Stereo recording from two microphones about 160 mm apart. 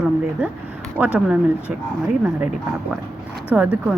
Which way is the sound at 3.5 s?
10° right (ahead or behind).